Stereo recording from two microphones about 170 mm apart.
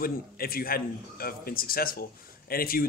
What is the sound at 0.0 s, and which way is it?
Speech, 60° left (ahead or behind).